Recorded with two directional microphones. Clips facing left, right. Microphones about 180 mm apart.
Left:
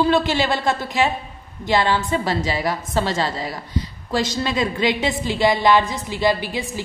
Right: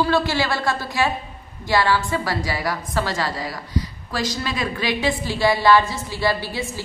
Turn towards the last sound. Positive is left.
turn(degrees=20)  # may be behind; listen again after turning